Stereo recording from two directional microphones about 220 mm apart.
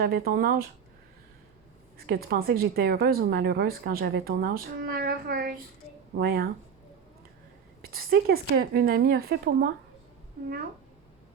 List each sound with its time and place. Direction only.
0.0 s a woman's voice: 45° right (ahead or behind)
2.0 s a woman's voice: 45° right (ahead or behind)
7.8 s a woman's voice: 45° right (ahead or behind)